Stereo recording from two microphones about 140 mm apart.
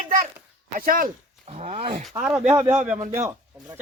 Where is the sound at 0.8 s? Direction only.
90° right.